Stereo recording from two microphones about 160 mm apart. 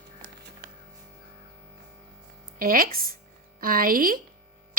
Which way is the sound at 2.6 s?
65° right (ahead or behind).